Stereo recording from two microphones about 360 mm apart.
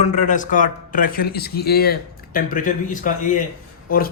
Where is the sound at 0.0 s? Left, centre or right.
Centre.